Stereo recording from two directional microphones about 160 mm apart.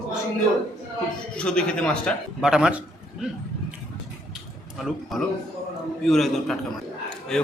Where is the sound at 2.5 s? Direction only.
5° right (ahead or behind).